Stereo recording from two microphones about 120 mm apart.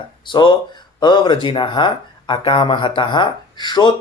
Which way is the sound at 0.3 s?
40° left (ahead or behind).